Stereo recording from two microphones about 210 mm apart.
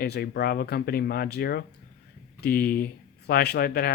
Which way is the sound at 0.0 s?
50° left (ahead or behind).